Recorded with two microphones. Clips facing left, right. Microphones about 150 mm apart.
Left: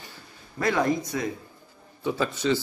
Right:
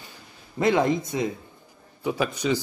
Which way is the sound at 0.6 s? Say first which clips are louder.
Right 3 dB; 20° right (ahead or behind).